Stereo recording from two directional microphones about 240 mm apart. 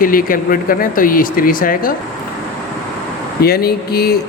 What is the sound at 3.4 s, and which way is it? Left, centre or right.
Speech, left.